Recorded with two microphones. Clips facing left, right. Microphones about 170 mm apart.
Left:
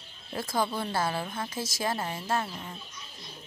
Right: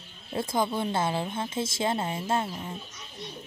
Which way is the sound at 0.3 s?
20° right (ahead or behind).